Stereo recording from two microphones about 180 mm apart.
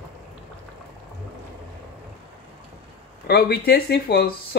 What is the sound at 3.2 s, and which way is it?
Speech, 60° left (ahead or behind).